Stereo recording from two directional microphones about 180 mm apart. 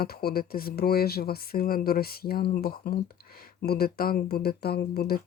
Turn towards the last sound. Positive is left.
turn(degrees=60)  # may be behind; listen again after turning